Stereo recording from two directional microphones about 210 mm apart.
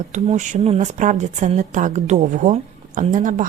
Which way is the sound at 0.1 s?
35° right (ahead or behind).